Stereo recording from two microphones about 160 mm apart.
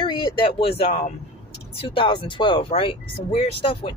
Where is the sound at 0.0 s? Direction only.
30° left (ahead or behind).